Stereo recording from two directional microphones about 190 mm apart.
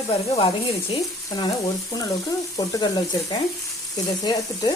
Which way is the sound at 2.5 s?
20° left (ahead or behind).